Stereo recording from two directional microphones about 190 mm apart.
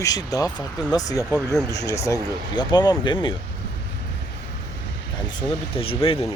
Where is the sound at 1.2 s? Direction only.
10° right (ahead or behind).